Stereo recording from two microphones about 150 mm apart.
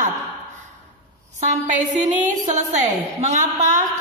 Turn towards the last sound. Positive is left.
turn(degrees=-55)  # may be behind; listen again after turning